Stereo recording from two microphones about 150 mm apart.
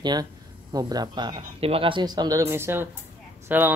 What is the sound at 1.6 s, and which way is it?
A man's voice, 40° right (ahead or behind).